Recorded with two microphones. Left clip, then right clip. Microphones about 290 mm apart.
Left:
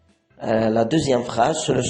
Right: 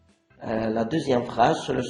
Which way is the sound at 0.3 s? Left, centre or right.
Left.